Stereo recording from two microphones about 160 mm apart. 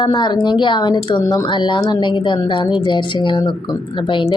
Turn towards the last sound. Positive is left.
turn(degrees=30)  # may be behind; listen again after turning